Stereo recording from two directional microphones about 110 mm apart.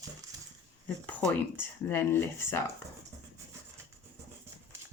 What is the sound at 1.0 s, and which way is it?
Speech, 20° left (ahead or behind).